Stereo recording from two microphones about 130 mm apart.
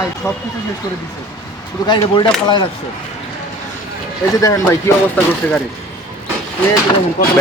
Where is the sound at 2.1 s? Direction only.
35° left (ahead or behind).